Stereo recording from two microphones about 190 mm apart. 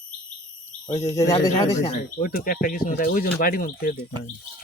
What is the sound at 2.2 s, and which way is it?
Speech, 50° left (ahead or behind).